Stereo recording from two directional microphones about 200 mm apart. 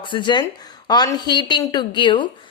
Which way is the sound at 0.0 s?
25° left (ahead or behind).